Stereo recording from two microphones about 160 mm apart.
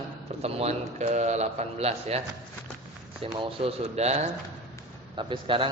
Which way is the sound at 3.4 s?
35° right (ahead or behind).